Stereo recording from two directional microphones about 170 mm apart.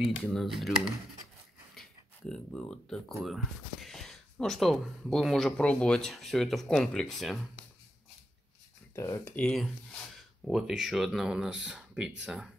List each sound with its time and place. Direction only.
0.2 s speech: centre (ahead or behind)
1.8 s speech: 5° left (ahead or behind)
8.9 s speech: 15° left (ahead or behind); by 12.1 s 5° right (ahead or behind)